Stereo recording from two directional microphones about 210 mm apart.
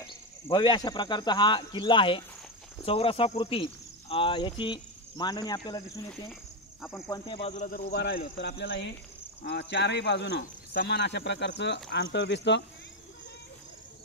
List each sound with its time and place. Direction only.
0.0 s speech: 20° left (ahead or behind)
7.1 s speech: 25° left (ahead or behind)
7.9 s speech: 50° left (ahead or behind)